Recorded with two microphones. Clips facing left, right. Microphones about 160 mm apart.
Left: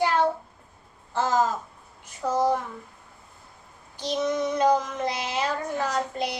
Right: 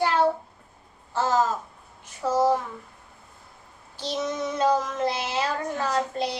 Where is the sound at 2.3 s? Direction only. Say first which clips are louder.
Right 2 dB; 10° right (ahead or behind).